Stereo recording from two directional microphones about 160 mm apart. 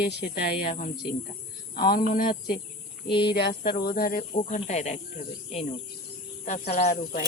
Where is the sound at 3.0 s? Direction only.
30° left (ahead or behind).